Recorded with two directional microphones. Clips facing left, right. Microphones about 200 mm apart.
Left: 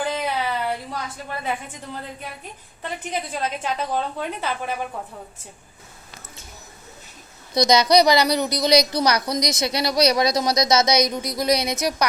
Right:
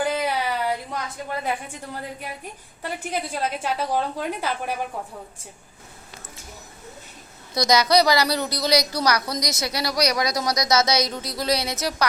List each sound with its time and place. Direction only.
0.0 s a sound: 10° right (ahead or behind)
1.5 s a woman's voice: 10° right (ahead or behind)
7.5 s a woman's voice: 20° left (ahead or behind)